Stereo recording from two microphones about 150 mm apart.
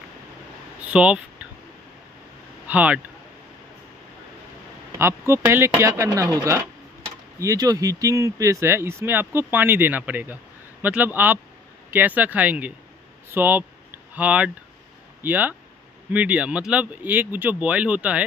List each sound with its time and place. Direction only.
0.8 s a sound: 5° right (ahead or behind)
2.7 s speech: 10° right (ahead or behind)
5.3 s speech: 15° right (ahead or behind)